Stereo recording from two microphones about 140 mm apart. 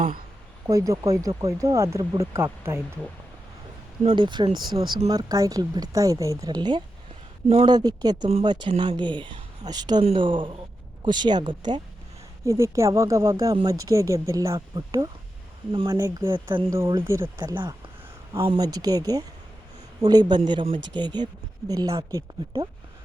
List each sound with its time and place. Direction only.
0.7 s speech: 25° right (ahead or behind)
4.1 s speech: 35° right (ahead or behind)
7.4 s speech: 45° right (ahead or behind)
7.7 s speech: 30° right (ahead or behind)
8.2 s speech: 45° right (ahead or behind)
8.4 s speech: 35° right (ahead or behind)
10.0 s speech: 40° right (ahead or behind)
12.5 s speech: 20° right (ahead or behind); by 16.0 s 35° right (ahead or behind)
16.0 s speech: 20° right (ahead or behind)
16.2 s speech: 35° right (ahead or behind)
16.6 s speech: 20° right (ahead or behind)
17.4 s speech: 35° right (ahead or behind)